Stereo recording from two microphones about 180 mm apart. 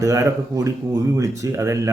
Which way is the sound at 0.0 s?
15° right (ahead or behind).